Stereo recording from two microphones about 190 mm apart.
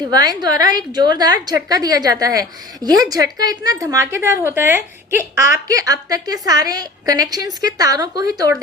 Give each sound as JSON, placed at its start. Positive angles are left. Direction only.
{"t": 0.1, "sound": "a woman's voice", "side_deg": -20}